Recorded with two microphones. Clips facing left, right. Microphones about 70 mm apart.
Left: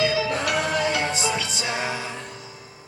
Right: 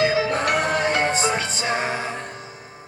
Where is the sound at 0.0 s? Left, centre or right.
Right.